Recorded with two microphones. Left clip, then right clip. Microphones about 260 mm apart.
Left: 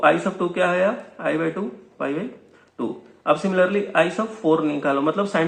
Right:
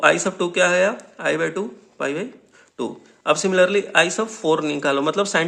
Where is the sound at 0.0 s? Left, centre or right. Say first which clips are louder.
Right 1 dB; right.